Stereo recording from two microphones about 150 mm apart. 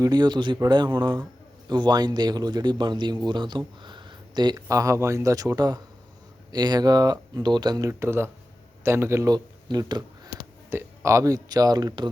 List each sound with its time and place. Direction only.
0.0 s speech: 25° right (ahead or behind)
10.7 s speech: 15° right (ahead or behind)